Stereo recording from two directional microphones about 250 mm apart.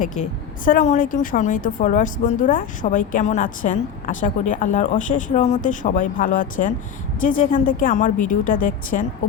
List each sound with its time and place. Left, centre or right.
0.2 s a woman's voice: left